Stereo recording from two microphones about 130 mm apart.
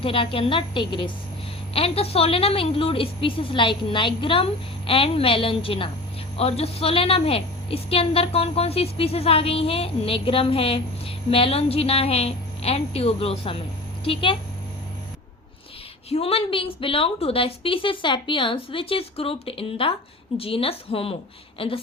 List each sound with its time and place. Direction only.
0.0 s a woman's voice: 45° left (ahead or behind)
1.7 s a woman's voice: 50° left (ahead or behind)
16.0 s a woman's voice: 50° left (ahead or behind)